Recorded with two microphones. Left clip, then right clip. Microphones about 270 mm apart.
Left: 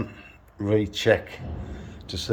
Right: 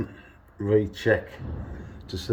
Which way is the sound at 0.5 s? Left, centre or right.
Centre.